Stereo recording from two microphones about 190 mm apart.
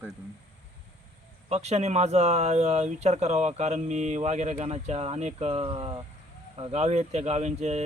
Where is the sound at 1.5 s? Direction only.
35° right (ahead or behind).